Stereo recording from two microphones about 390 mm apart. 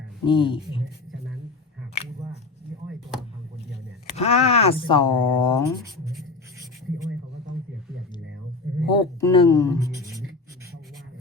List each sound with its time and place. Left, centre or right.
0.3 s speech: centre
4.2 s speech: centre
8.6 s a sound: right
9.0 s speech: centre